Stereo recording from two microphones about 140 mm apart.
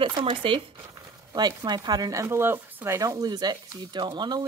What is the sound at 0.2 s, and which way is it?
Speech, 40° right (ahead or behind).